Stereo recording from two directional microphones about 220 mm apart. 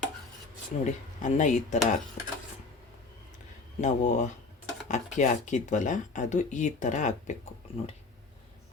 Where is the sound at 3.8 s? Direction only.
35° left (ahead or behind).